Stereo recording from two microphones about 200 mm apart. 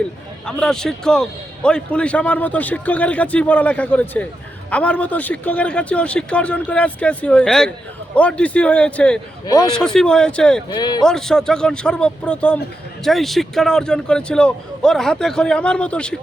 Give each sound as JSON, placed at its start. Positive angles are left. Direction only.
{"t": 0.4, "sound": "a man's voice", "side_deg": 5}
{"t": 10.7, "sound": "speech", "side_deg": 20}
{"t": 11.0, "sound": "a man's voice", "side_deg": 5}